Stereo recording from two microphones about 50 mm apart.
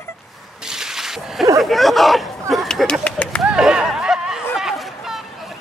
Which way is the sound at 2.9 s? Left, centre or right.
Left.